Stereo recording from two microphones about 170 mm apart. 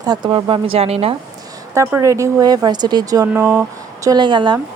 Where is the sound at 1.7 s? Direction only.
15° right (ahead or behind).